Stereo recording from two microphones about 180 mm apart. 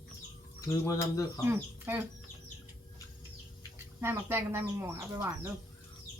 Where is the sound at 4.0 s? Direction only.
10° right (ahead or behind).